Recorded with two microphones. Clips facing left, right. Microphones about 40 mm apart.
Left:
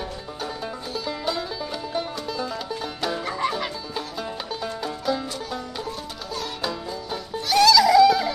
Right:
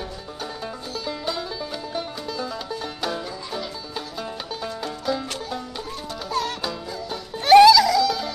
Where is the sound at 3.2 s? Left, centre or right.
Left.